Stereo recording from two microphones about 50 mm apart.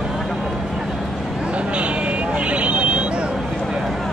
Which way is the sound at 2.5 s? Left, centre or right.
Right.